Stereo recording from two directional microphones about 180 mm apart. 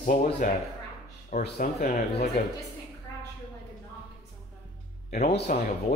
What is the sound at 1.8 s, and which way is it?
Speech, 45° left (ahead or behind).